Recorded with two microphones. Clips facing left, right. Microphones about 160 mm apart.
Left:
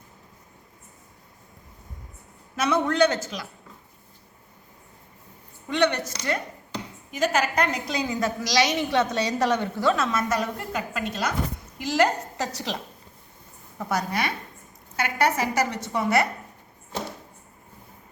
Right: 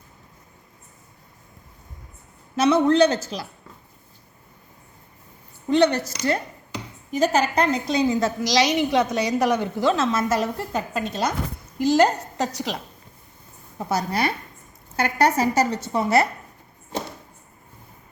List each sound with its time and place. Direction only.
2.6 s a woman's voice: 30° right (ahead or behind)
5.6 s a woman's voice: 30° right (ahead or behind)
6.0 s speech: 10° right (ahead or behind)
7.1 s a woman's voice: 30° right (ahead or behind); by 9.8 s 10° right (ahead or behind)
9.8 s a woman's voice: 25° right (ahead or behind)
12.5 s speech: 10° right (ahead or behind)
13.7 s a woman's voice: 30° right (ahead or behind)